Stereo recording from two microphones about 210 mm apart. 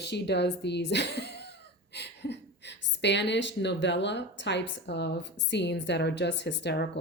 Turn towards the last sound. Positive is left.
turn(degrees=55)  # may be behind; listen again after turning